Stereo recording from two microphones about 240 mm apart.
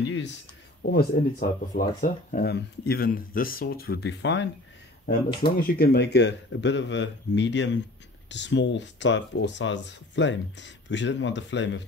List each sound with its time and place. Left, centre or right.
0.0 s a sound: left
0.8 s speech: left
5.6 s speech: left